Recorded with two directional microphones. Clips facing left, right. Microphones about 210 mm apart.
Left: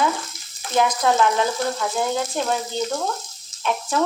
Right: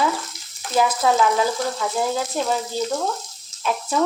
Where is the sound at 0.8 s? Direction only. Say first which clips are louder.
Even; 5° right (ahead or behind).